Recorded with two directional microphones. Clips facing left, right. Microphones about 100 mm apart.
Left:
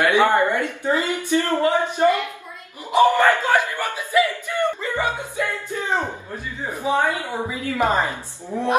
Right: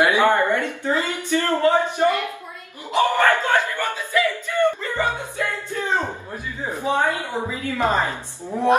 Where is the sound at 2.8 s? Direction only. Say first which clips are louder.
Left 3 dB; 20° left (ahead or behind).